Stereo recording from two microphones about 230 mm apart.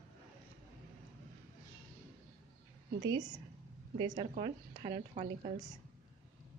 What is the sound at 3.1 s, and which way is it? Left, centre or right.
Speech, centre.